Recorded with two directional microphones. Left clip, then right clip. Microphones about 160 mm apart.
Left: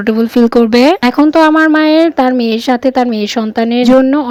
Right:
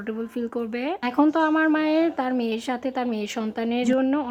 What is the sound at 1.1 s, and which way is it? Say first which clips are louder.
Speech: left 8 dB; 35° left (ahead or behind).